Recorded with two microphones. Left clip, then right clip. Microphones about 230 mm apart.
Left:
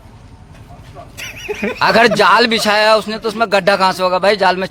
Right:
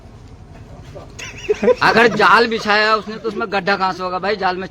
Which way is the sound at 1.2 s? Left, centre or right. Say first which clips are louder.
Left 4 dB; left.